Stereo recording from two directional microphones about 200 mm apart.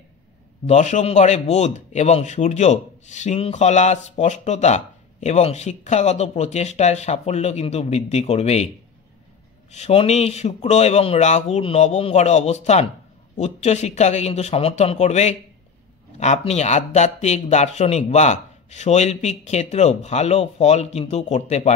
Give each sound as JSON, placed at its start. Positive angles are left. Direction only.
{"t": 0.7, "sound": "a man's voice", "side_deg": 35}
{"t": 9.7, "sound": "a man's voice", "side_deg": 30}